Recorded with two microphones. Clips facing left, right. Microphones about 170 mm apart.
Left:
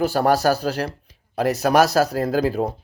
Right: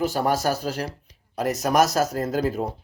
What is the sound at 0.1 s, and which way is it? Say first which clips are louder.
Speech: left 5 dB; 70° left (ahead or behind).